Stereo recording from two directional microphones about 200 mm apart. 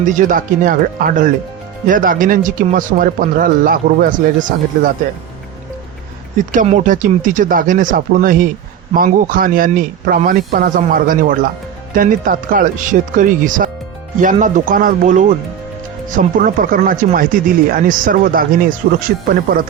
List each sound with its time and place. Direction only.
0.0 s speech: 40° right (ahead or behind)
6.5 s speech: 40° right (ahead or behind)